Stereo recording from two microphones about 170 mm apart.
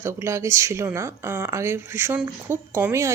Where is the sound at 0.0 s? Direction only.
15° right (ahead or behind).